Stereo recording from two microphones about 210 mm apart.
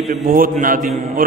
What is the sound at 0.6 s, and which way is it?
Speech, 40° right (ahead or behind).